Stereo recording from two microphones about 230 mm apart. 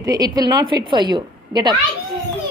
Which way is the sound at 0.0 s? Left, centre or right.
Centre.